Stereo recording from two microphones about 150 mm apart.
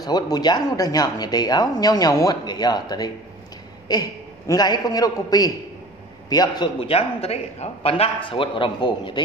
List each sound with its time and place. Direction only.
0.0 s a man's voice: 25° left (ahead or behind)